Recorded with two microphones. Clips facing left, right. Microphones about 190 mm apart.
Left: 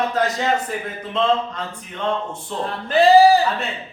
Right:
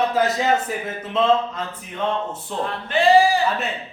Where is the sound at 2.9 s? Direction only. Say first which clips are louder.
Left 4 dB; 35° left (ahead or behind).